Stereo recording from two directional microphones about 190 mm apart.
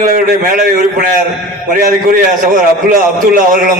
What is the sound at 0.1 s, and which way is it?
A man's voice, 45° right (ahead or behind).